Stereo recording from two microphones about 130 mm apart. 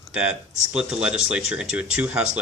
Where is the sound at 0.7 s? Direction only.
5° right (ahead or behind).